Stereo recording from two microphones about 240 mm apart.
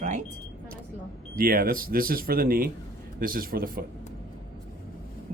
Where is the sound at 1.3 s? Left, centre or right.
Right.